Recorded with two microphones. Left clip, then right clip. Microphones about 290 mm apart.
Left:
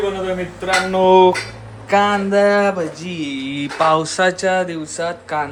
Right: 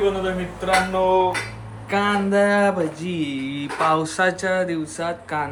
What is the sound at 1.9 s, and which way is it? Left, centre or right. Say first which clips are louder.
Speech: left 6 dB; centre.